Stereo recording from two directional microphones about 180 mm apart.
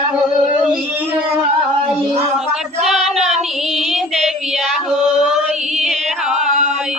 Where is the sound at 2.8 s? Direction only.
Centre (ahead or behind).